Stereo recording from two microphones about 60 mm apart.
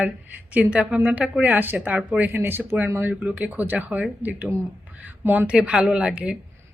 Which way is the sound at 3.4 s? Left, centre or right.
Right.